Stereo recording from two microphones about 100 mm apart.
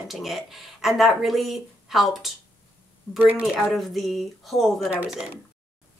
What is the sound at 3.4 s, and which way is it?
Speech, centre (ahead or behind).